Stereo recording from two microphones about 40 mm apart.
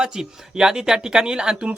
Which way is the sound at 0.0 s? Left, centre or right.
Centre.